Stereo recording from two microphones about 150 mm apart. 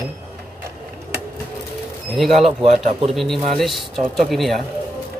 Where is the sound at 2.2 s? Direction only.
Centre (ahead or behind).